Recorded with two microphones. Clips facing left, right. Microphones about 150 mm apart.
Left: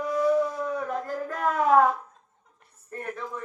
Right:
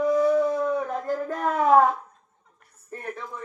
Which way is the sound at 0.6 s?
25° right (ahead or behind).